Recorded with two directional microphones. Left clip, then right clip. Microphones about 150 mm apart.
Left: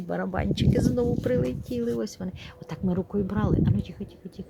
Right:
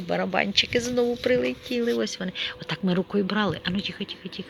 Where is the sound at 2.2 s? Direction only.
10° left (ahead or behind).